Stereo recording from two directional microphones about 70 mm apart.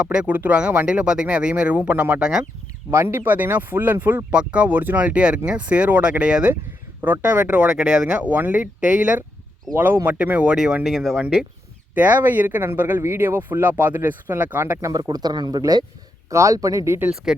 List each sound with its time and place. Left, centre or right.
0.0 s speech: centre
2.9 s speech: right
4.3 s speech: centre
9.7 s speech: right; by 11.4 s centre
11.9 s speech: right
14.8 s speech: right
15.0 s speech: right
16.3 s speech: right
17.3 s speech: centre